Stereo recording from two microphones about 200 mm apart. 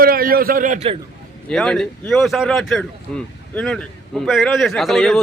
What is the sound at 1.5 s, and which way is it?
Speech, 5° left (ahead or behind).